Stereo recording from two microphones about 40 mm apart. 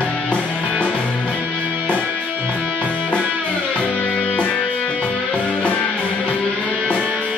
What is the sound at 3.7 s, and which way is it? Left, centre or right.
Music, left.